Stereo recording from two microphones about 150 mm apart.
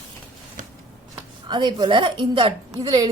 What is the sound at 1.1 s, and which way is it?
A woman's voice, 30° right (ahead or behind).